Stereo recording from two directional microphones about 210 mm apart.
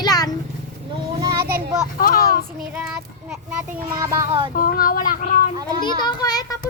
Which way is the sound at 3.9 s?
15° right (ahead or behind).